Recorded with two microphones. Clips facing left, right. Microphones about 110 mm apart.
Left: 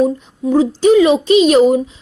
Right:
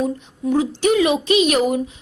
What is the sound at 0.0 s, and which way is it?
Speech, 35° left (ahead or behind).